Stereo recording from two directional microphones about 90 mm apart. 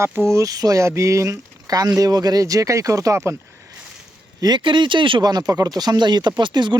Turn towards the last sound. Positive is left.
turn(degrees=-60)  # may be behind; listen again after turning